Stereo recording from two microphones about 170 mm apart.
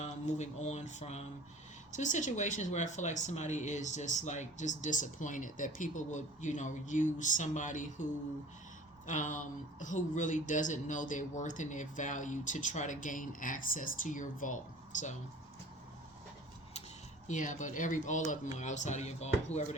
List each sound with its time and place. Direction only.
0.0 s speech: 45° left (ahead or behind)
9.0 s speech: 45° left (ahead or behind)
17.2 s speech: 45° left (ahead or behind)